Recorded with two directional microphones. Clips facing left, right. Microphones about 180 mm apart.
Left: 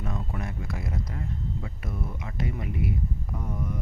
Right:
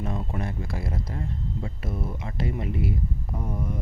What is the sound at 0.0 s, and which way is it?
Speech, 30° right (ahead or behind).